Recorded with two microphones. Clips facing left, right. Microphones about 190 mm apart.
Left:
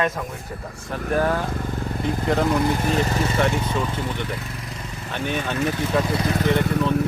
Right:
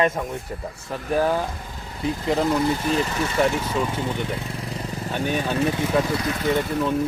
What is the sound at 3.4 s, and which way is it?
Speech, 5° right (ahead or behind).